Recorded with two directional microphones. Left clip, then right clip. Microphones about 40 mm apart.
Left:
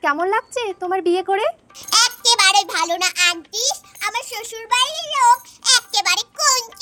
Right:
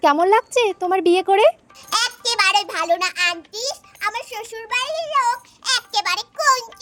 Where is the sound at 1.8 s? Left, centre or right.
Right.